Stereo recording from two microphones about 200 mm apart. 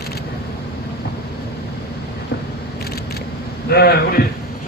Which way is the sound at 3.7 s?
50° left (ahead or behind).